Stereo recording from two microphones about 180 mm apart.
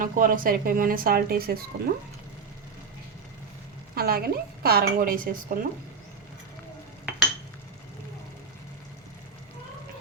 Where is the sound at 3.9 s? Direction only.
60° right (ahead or behind).